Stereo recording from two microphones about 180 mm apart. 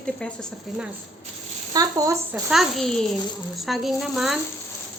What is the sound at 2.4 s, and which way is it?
Speech, centre (ahead or behind).